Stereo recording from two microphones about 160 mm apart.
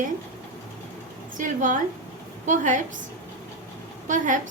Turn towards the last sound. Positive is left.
turn(degrees=-50)  # may be behind; listen again after turning